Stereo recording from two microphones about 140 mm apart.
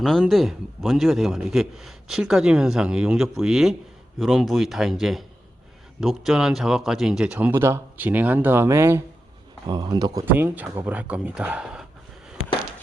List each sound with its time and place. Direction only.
0.0 s a man's voice: centre (ahead or behind); by 9.0 s 20° right (ahead or behind)
9.6 s speech: 30° right (ahead or behind)
10.2 s speech: 15° right (ahead or behind)